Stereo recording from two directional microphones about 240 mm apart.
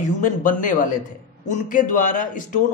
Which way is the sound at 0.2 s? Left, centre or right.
Left.